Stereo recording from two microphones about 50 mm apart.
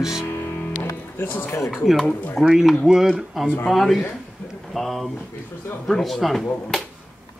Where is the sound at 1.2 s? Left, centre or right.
Left.